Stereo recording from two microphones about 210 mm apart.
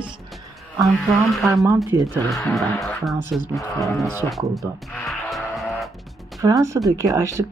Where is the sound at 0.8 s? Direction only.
Centre (ahead or behind).